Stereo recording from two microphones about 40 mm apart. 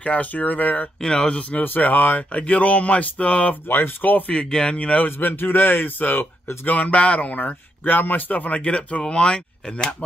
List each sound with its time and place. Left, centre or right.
0.0 s speech: left
1.0 s speech: left
1.6 s speech: left
2.3 s speech: left
3.6 s speech: left
4.3 s speech: left
4.7 s speech: left
5.0 s speech: left
6.6 s speech: left